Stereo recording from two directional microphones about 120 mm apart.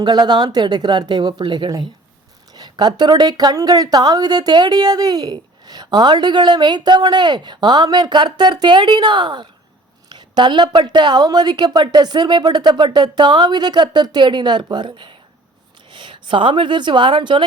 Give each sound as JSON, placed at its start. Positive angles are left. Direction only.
{"t": 0.0, "sound": "speech", "side_deg": -35}